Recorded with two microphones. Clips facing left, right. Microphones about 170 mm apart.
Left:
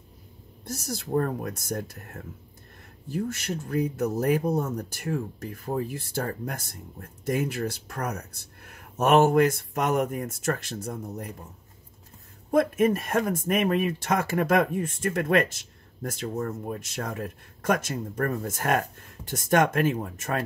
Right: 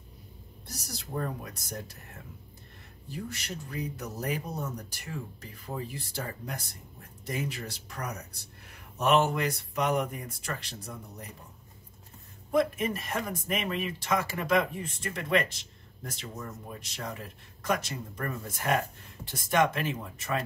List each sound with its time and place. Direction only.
0.7 s speech: 50° left (ahead or behind)
12.4 s speech: 50° left (ahead or behind)